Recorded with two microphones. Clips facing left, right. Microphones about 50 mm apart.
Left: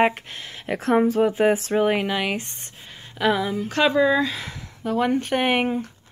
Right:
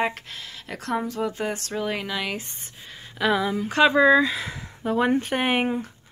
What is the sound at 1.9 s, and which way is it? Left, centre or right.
Speech, left.